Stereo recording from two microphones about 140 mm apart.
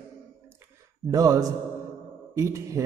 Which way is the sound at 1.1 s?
25° right (ahead or behind).